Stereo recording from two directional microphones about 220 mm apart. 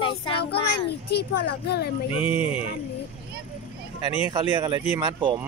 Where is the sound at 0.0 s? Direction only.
25° left (ahead or behind).